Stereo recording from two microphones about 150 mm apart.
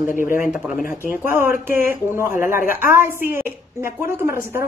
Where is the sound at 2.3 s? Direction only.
65° left (ahead or behind).